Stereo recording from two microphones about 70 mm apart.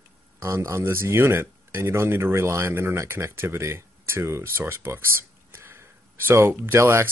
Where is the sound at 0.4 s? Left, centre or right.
Right.